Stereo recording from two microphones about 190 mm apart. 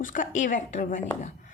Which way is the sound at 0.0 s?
45° left (ahead or behind).